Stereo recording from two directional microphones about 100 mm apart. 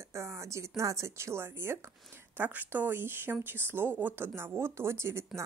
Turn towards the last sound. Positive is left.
turn(degrees=-25)  # may be behind; listen again after turning